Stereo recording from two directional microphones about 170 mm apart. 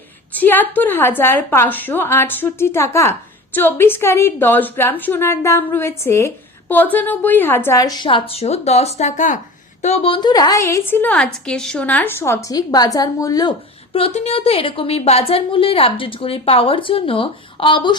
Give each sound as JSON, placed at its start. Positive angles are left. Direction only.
{"t": 0.3, "sound": "a woman's voice", "side_deg": 10}
{"t": 13.9, "sound": "a woman's voice", "side_deg": 35}